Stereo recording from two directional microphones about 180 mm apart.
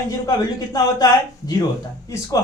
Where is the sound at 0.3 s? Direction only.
20° left (ahead or behind).